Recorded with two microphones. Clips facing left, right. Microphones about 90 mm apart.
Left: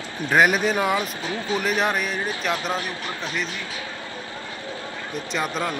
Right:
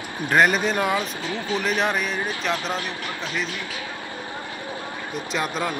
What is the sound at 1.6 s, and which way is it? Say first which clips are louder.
Speech: even; centre (ahead or behind).